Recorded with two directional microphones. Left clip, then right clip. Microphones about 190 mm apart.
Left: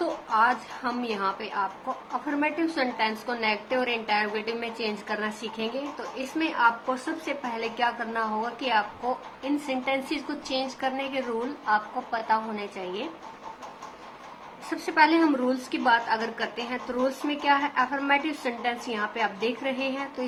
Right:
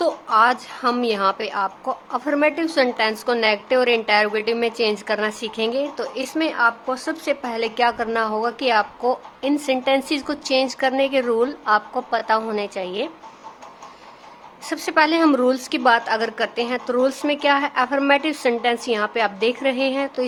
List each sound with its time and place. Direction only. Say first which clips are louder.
0.0 s a woman's voice: right 7 dB; 60° right (ahead or behind)
14.7 s a woman's voice: right 4 dB; 55° right (ahead or behind)